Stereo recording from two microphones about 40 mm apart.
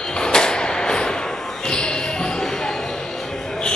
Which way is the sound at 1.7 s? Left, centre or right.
Left.